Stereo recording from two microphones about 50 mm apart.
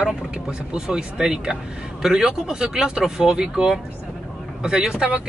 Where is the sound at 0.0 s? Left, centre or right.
Centre.